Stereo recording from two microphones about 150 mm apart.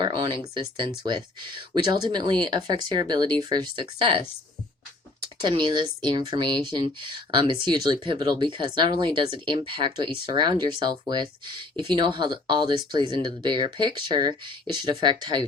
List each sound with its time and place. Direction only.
0.0 s speech: 30° right (ahead or behind)
5.4 s speech: 30° right (ahead or behind)